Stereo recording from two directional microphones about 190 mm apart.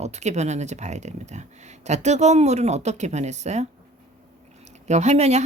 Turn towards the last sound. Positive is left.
turn(degrees=-35)  # may be behind; listen again after turning